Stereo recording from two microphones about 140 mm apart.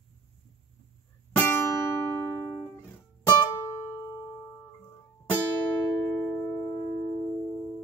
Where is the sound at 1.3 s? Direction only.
15° left (ahead or behind).